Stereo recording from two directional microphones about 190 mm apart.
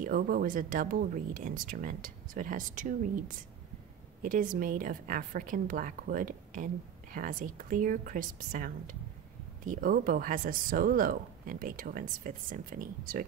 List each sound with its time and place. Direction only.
0.0 s a woman's voice: 50° right (ahead or behind)